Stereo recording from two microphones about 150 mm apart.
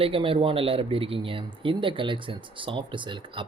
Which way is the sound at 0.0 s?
40° right (ahead or behind).